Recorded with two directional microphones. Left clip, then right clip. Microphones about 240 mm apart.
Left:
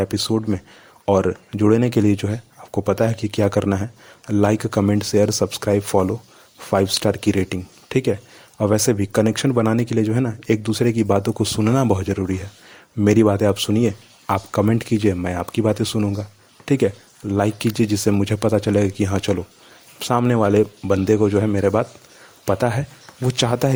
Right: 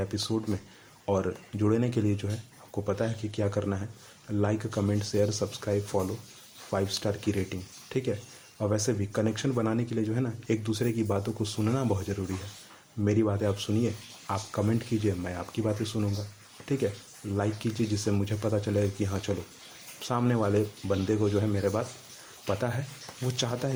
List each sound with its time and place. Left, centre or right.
0.0 s speech: left